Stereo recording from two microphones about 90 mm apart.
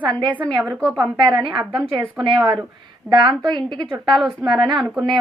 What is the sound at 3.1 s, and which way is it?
Speech, 50° right (ahead or behind).